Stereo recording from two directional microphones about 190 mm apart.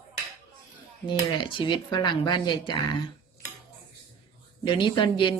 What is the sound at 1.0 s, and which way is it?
Speech, 25° left (ahead or behind).